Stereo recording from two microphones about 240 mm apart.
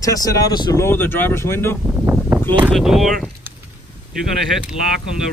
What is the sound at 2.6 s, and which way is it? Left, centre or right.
Speech, centre.